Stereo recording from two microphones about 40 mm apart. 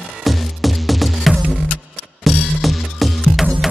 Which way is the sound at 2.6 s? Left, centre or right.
Centre.